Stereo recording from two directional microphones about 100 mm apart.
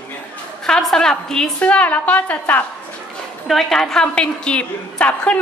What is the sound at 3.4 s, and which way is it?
A woman's voice, 5° left (ahead or behind).